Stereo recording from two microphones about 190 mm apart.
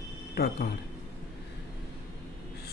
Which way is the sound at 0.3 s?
55° left (ahead or behind).